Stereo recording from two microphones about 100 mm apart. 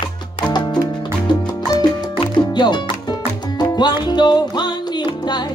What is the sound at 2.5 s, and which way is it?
Music, 45° left (ahead or behind).